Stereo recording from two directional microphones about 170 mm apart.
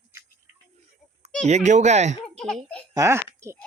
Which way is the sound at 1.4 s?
40° right (ahead or behind).